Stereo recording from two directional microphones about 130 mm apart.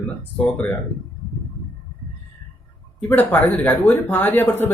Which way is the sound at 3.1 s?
15° left (ahead or behind).